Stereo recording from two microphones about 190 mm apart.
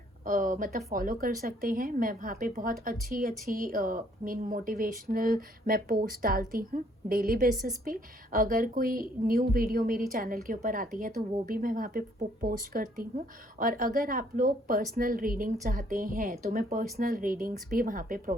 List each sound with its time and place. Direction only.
0.3 s a woman's voice: 45° right (ahead or behind)